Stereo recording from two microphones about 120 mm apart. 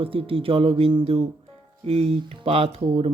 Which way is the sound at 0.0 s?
50° right (ahead or behind).